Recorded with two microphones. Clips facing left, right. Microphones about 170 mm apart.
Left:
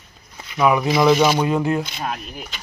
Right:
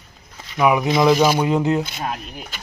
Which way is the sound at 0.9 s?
Centre (ahead or behind).